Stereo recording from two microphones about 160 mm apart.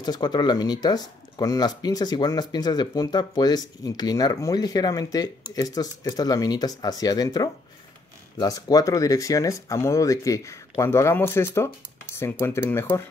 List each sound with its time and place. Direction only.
0.0 s speech: 25° left (ahead or behind)